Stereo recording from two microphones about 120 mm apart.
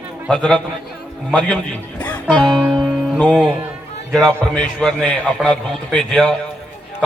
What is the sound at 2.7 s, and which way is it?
Music, 5° left (ahead or behind).